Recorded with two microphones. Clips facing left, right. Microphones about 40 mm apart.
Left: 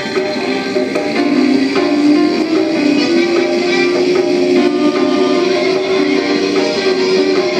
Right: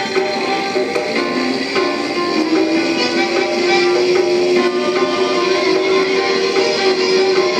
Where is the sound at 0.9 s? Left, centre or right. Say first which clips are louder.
Left 4 dB; centre.